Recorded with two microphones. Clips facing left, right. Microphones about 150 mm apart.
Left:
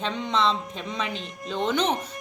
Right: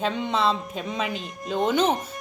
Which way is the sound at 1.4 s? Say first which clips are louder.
Right 3 dB; 45° right (ahead or behind).